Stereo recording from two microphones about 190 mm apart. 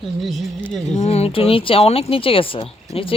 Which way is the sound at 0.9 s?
35° left (ahead or behind).